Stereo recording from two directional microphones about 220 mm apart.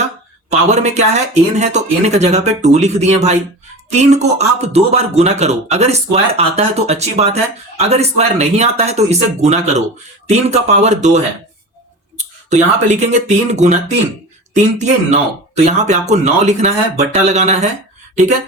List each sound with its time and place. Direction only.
0.7 s a man's voice: 30° right (ahead or behind)